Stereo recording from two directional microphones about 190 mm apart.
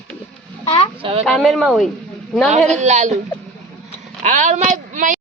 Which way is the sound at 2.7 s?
35° right (ahead or behind).